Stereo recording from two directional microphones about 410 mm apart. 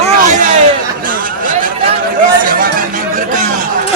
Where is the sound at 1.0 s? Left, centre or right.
Centre.